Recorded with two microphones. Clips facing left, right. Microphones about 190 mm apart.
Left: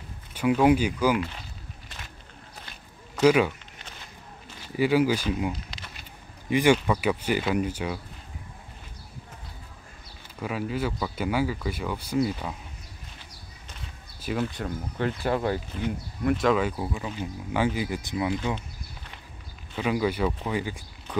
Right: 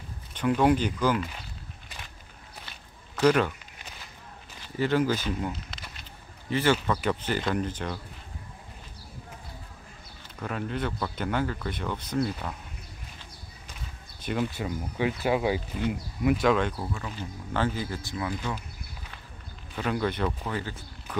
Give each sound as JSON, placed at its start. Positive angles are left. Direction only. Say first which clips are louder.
{"t": 0.3, "sound": "speech", "louder": "left 2 dB", "side_deg": 10}
{"t": 3.2, "sound": "speech", "louder": "left 2 dB", "side_deg": 10}
{"t": 4.7, "sound": "speech", "louder": "left 3 dB", "side_deg": 10}
{"t": 5.5, "sound": "a sound", "louder": "left 3 dB", "side_deg": 0}
{"t": 6.5, "sound": "speech", "louder": "left 4 dB", "side_deg": 15}
{"t": 10.4, "sound": "speech", "louder": "left 2 dB", "side_deg": 5}
{"t": 14.4, "sound": "speech", "louder": "even", "side_deg": -5}
{"t": 16.9, "sound": "speech", "louder": "left 3 dB", "side_deg": 15}
{"t": 19.7, "sound": "speech", "louder": "left 3 dB", "side_deg": 5}